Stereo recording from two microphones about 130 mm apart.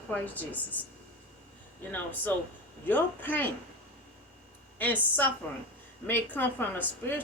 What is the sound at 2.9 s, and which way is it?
Speech, 15° left (ahead or behind).